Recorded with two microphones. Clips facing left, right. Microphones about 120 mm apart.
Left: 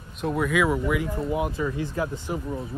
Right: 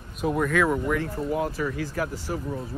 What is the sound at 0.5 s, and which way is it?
Speech, 10° left (ahead or behind).